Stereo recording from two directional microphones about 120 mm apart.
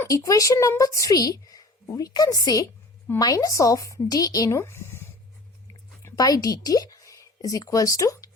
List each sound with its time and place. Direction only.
0.0 s a woman's voice: 25° left (ahead or behind)